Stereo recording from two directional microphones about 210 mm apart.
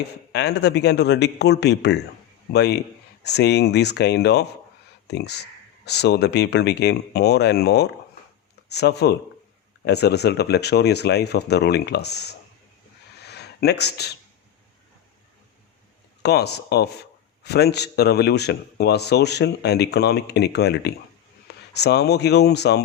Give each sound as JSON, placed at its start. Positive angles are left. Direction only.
{"t": 0.3, "sound": "a man's voice", "side_deg": 55}
{"t": 13.2, "sound": "a sound", "side_deg": 50}
{"t": 16.2, "sound": "a man's voice", "side_deg": 50}